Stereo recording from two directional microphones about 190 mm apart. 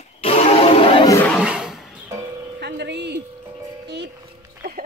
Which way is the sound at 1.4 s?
5° right (ahead or behind).